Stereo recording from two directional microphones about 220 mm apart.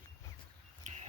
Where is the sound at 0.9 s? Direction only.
35° right (ahead or behind).